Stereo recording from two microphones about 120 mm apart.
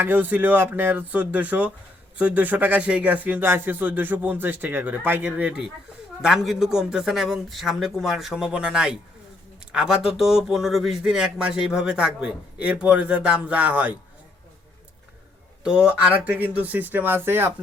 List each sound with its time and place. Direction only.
0.0 s a man's voice: 15° right (ahead or behind)
15.6 s speech: 10° right (ahead or behind)